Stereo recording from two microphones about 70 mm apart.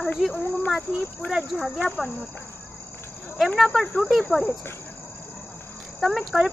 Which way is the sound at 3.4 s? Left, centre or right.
Centre.